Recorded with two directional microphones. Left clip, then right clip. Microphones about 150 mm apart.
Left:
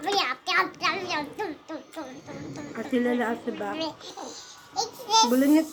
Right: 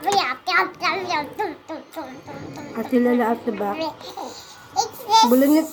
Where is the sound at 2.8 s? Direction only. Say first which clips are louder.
Right 7 dB; 30° right (ahead or behind).